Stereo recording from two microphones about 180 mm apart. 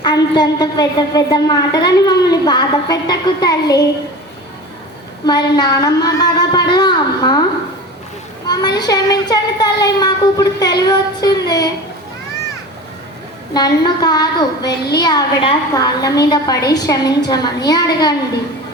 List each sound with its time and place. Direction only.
0.0 s a woman's voice: 20° left (ahead or behind)
5.2 s a woman's voice: 25° left (ahead or behind)
8.4 s a woman's voice: 25° left (ahead or behind)
13.5 s a woman's voice: 20° left (ahead or behind)